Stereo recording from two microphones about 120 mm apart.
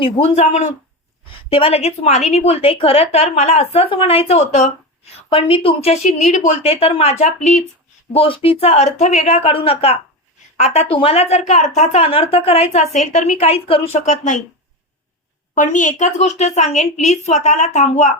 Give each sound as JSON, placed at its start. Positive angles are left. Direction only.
{"t": 0.0, "sound": "a woman's voice", "side_deg": 60}
{"t": 1.5, "sound": "a woman's voice", "side_deg": 50}
{"t": 5.3, "sound": "a woman's voice", "side_deg": 50}
{"t": 6.6, "sound": "a woman's voice", "side_deg": 55}
{"t": 8.1, "sound": "a woman's voice", "side_deg": 50}
{"t": 14.0, "sound": "speech", "side_deg": 90}
{"t": 15.5, "sound": "a woman's voice", "side_deg": 90}